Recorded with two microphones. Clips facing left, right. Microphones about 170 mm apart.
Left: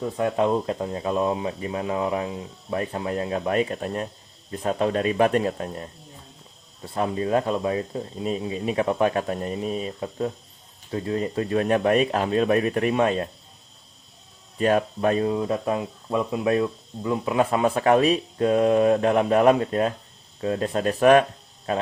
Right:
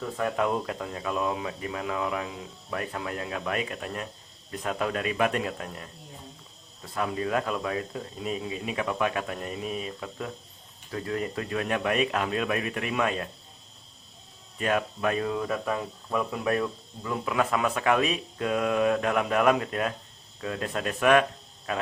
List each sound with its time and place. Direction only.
0.0 s speech: 25° left (ahead or behind)
14.6 s speech: 35° left (ahead or behind)